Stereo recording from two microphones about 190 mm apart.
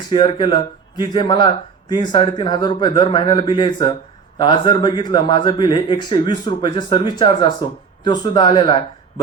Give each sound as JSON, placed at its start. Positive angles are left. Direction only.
{"t": 0.1, "sound": "speech", "side_deg": 25}